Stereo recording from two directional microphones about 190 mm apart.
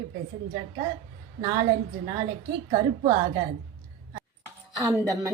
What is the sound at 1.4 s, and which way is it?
Speech, 20° right (ahead or behind).